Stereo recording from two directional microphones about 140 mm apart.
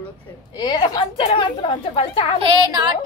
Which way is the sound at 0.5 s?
30° left (ahead or behind).